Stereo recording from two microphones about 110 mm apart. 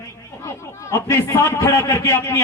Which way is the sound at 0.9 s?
30° left (ahead or behind).